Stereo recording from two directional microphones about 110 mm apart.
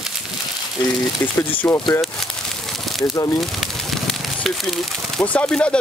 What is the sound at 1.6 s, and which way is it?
Speech, 5° left (ahead or behind).